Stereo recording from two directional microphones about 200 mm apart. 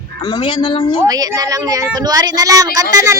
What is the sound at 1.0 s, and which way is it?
Speech, 20° right (ahead or behind).